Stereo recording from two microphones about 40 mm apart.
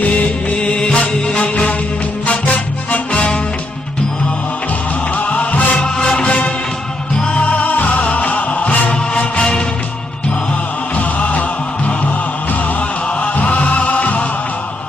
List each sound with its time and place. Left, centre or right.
0.0 s music: left
0.6 s music: left
5.1 s music: left
11.0 s music: left
13.2 s music: left